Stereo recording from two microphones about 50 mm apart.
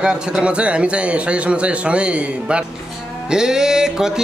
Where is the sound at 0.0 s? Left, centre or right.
Right.